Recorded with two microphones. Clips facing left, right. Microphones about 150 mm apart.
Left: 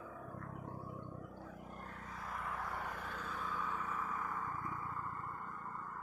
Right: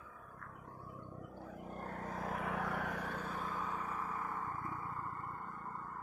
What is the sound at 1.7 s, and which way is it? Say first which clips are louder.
Vehicle: right 6 dB; 45° right (ahead or behind).